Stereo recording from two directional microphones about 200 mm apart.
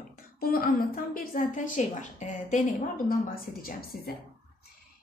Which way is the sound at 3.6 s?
50° left (ahead or behind).